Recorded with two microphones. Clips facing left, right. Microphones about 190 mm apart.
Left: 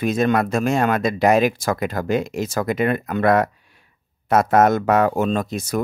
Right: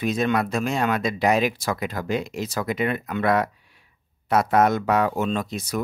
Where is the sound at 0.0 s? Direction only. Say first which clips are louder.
Left 4 dB; 50° left (ahead or behind).